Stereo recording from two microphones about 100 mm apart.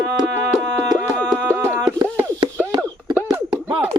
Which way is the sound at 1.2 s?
25° right (ahead or behind).